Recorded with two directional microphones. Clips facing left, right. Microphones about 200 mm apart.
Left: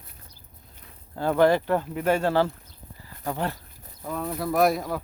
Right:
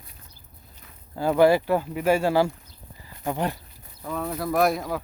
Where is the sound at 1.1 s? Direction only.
10° right (ahead or behind).